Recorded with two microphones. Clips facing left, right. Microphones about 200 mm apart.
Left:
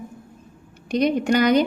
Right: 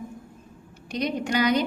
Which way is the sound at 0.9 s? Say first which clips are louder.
Left 7 dB; 50° left (ahead or behind).